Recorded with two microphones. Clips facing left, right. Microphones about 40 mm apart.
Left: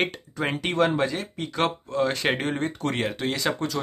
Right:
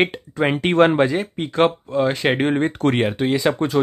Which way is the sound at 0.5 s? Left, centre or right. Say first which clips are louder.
Right 8 dB; right.